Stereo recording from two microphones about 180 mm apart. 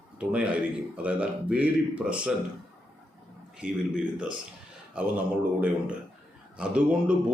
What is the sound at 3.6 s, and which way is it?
A man's voice, 5° right (ahead or behind).